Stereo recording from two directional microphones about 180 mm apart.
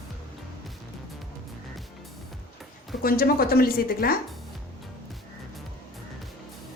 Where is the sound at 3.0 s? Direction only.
55° left (ahead or behind).